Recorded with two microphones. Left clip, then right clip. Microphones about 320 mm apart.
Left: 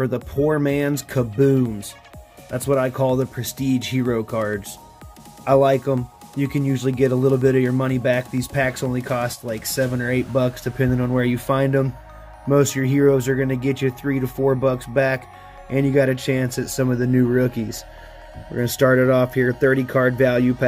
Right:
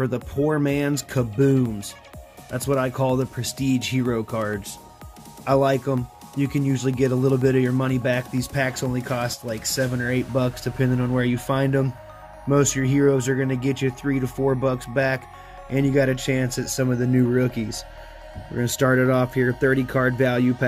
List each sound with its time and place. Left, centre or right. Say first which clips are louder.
0.0 s speech: left 3 dB; centre